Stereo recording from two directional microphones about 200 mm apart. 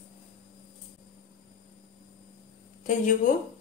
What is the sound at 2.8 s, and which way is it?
Speech, 40° left (ahead or behind).